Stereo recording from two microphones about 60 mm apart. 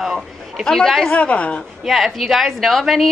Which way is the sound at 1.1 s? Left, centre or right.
Left.